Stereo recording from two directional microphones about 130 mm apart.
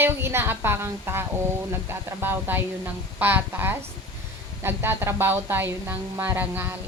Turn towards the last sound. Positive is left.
turn(degrees=-15)  # may be behind; listen again after turning